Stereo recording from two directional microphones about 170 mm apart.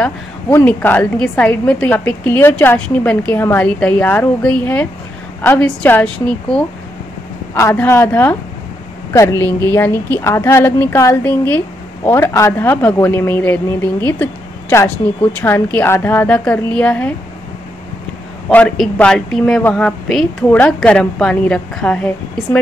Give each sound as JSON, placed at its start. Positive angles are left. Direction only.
{"t": 0.0, "sound": "a woman's voice", "side_deg": 10}
{"t": 18.5, "sound": "a woman's voice", "side_deg": 10}